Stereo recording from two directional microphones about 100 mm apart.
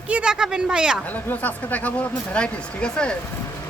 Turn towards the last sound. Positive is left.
turn(degrees=10)  # may be behind; listen again after turning